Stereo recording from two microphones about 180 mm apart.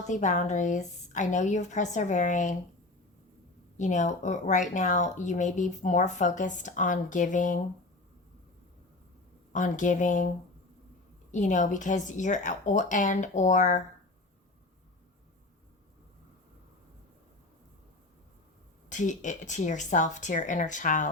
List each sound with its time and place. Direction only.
0.1 s speech: 45° left (ahead or behind)
3.8 s speech: 40° left (ahead or behind)
9.5 s speech: 45° left (ahead or behind)
11.3 s speech: 45° left (ahead or behind)
18.9 s speech: 45° left (ahead or behind)